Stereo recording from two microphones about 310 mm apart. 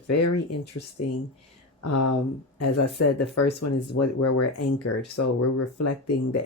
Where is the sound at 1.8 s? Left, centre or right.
Left.